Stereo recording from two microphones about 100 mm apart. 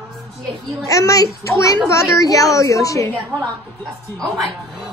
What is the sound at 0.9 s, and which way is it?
A woman's voice, 35° left (ahead or behind).